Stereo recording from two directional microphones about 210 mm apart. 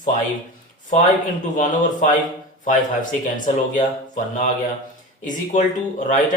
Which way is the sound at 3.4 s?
40° left (ahead or behind).